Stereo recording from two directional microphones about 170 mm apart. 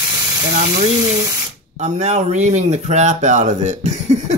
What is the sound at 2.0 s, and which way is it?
Speech, 40° right (ahead or behind).